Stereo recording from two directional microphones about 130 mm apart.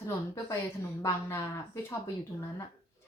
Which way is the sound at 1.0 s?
20° left (ahead or behind).